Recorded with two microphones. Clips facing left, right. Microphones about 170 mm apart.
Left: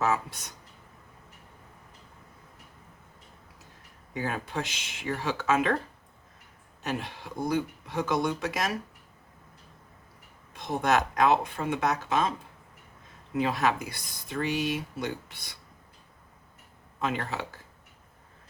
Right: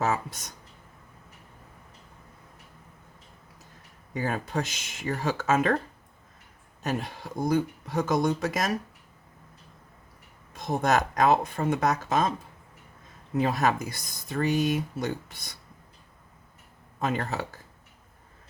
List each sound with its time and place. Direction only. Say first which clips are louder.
0.0 s speech: even; 40° right (ahead or behind)
4.1 s speech: right 3 dB; 45° right (ahead or behind)
6.8 s speech: right 3 dB; 40° right (ahead or behind)
10.5 s speech: right 1 dB; 40° right (ahead or behind)
13.4 s speech: right 2 dB; 45° right (ahead or behind)
17.0 s speech: right 2 dB; 40° right (ahead or behind)